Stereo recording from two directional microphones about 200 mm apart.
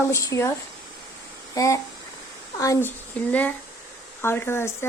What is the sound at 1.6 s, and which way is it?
Speech, 15° left (ahead or behind).